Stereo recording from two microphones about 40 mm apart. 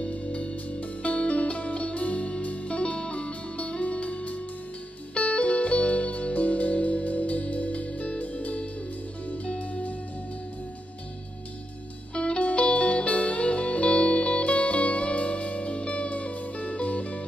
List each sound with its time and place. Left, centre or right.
0.0 s music: left
12.1 s music: left